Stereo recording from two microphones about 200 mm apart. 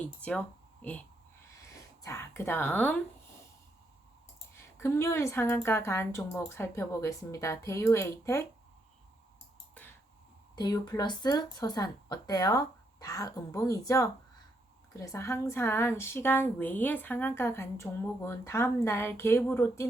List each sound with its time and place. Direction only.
0.0 s speech: 5° left (ahead or behind)
4.5 s a woman's voice: 10° left (ahead or behind)
10.5 s a woman's voice: 20° left (ahead or behind)